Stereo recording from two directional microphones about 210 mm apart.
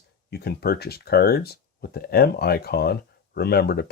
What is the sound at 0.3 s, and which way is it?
Speech, 50° left (ahead or behind).